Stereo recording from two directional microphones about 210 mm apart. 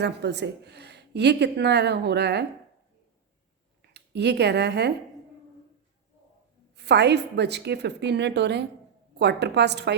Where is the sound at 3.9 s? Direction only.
55° right (ahead or behind).